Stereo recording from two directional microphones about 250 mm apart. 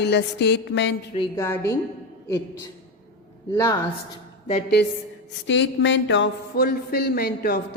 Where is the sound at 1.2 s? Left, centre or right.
Centre.